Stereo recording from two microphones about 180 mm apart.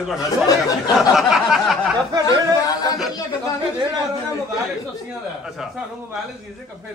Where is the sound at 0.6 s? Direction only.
20° left (ahead or behind).